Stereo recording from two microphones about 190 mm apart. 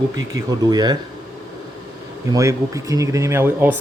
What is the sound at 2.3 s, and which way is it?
Speech, 15° right (ahead or behind).